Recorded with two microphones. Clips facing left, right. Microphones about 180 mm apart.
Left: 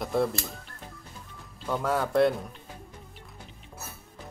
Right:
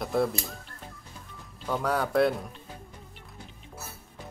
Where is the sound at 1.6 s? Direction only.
Centre (ahead or behind).